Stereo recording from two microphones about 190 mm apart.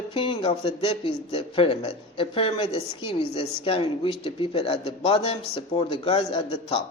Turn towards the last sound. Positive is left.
turn(degrees=30)  # may be behind; listen again after turning